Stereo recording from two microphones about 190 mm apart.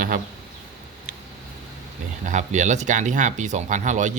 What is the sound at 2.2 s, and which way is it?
Speech, 40° right (ahead or behind).